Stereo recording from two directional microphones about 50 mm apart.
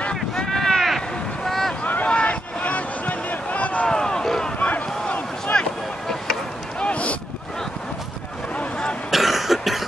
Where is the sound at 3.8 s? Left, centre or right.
Centre.